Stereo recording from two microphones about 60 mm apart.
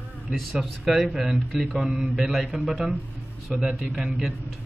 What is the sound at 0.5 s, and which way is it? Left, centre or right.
Speech, centre.